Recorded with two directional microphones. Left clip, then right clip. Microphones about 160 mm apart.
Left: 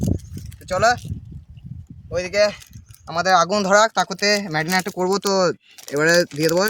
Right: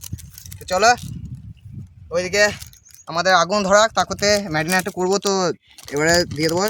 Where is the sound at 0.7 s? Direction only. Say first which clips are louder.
Right 2 dB; 60° right (ahead or behind).